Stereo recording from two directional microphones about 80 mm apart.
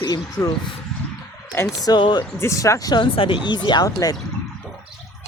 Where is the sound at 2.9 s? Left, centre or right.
Left.